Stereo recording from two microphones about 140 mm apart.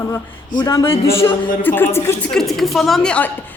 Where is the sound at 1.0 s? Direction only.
40° left (ahead or behind).